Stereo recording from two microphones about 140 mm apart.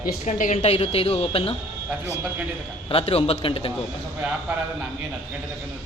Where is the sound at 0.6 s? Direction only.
45° left (ahead or behind).